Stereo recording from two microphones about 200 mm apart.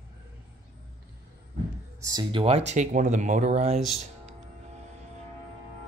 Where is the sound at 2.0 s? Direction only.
20° right (ahead or behind).